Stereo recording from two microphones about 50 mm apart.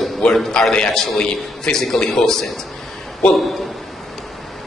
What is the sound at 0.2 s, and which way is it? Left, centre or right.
A man's voice, centre.